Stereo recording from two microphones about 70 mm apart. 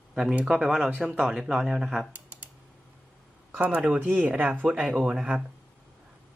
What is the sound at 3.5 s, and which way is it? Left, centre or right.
Speech, right.